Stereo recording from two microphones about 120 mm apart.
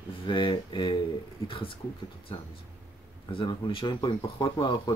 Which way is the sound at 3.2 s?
45° left (ahead or behind).